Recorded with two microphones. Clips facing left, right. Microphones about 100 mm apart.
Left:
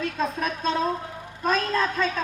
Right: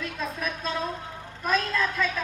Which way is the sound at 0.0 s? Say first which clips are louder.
Left 5 dB; 35° left (ahead or behind).